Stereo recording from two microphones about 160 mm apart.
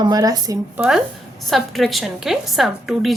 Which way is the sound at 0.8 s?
5° right (ahead or behind).